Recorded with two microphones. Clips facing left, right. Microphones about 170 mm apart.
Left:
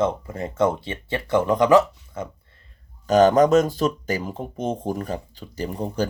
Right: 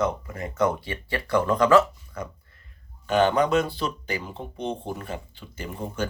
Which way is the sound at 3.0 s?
40° left (ahead or behind).